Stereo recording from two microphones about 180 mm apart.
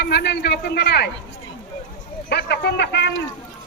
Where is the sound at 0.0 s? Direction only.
65° left (ahead or behind).